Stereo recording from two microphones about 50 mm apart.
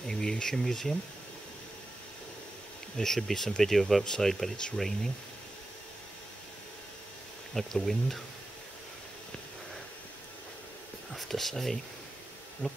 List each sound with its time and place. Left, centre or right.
0.0 s speech: centre
3.0 s speech: centre
7.5 s speech: centre
11.1 s speech: centre
12.6 s speech: left